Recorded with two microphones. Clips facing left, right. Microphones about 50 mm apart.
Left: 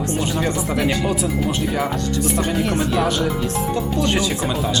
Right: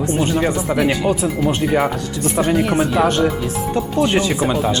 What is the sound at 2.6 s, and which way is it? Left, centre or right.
Speech, centre.